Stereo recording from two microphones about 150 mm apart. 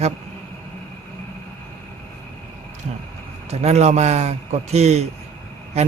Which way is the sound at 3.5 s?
45° right (ahead or behind).